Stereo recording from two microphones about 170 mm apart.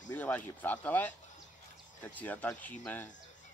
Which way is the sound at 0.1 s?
10° left (ahead or behind).